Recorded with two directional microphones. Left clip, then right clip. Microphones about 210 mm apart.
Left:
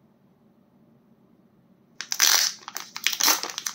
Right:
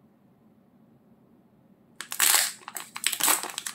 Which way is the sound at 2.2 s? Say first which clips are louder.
Left 4 dB; centre (ahead or behind).